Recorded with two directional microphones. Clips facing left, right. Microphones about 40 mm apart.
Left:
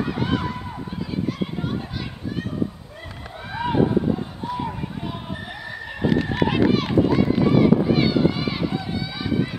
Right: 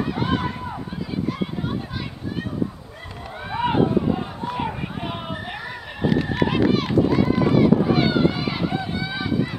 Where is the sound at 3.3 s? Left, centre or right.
Centre.